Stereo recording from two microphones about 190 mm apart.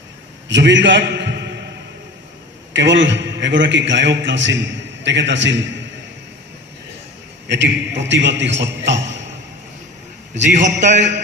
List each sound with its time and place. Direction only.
0.5 s a man's voice: 70° right (ahead or behind)
2.7 s a man's voice: 70° right (ahead or behind)
7.4 s a man's voice: 70° right (ahead or behind)
10.5 s a man's voice: 40° right (ahead or behind)